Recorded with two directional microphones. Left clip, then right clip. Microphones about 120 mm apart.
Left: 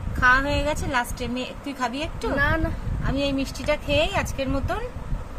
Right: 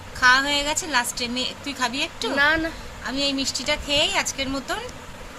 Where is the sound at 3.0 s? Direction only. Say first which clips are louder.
Right 1 dB; 30° left (ahead or behind).